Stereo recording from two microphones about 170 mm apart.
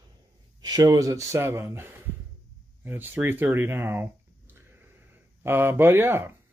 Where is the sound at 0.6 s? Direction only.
25° right (ahead or behind).